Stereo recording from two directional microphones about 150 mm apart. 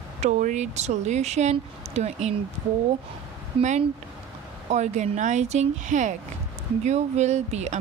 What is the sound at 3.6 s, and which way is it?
Speech, 40° right (ahead or behind).